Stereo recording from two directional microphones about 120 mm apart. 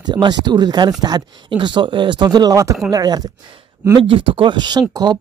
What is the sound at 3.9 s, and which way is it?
A man's voice, 45° right (ahead or behind).